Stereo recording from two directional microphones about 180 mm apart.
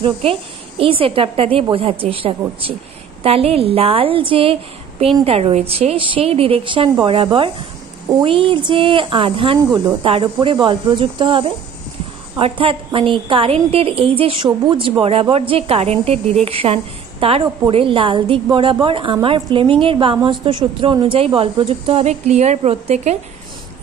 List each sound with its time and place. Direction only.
0.0 s a woman's voice: 30° right (ahead or behind)